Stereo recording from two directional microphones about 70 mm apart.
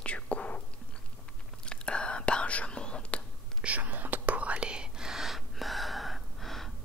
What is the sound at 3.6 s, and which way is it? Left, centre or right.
Whispering, right.